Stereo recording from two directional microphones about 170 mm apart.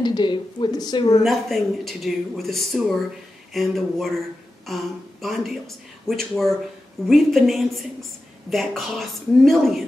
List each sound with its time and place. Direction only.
0.0 s a woman's voice: 25° left (ahead or behind)
1.2 s speech: centre (ahead or behind)